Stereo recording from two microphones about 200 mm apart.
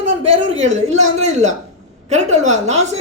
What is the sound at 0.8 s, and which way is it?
Speech, 35° right (ahead or behind).